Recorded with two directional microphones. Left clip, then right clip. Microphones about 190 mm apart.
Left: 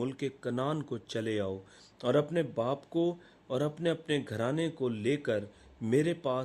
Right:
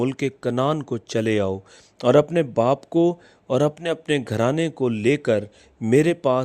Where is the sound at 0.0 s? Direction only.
45° right (ahead or behind).